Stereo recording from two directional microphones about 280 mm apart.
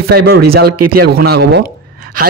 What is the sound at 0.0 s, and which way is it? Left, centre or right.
A man's voice, right.